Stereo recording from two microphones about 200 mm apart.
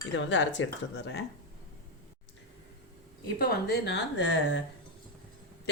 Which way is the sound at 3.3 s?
50° left (ahead or behind).